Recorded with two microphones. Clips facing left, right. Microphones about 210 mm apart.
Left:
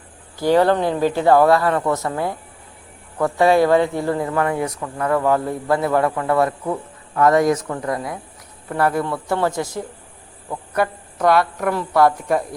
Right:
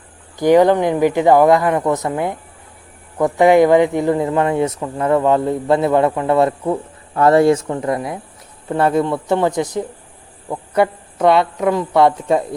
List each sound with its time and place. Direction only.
0.3 s speech: 15° right (ahead or behind)